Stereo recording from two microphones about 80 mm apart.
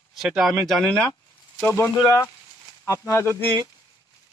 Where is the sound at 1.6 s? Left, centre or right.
Left.